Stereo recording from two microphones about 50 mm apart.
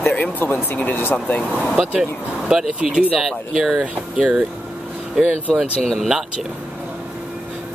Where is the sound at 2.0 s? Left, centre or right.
Centre.